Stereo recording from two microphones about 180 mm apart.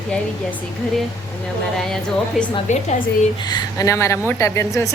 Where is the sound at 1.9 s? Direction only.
5° left (ahead or behind).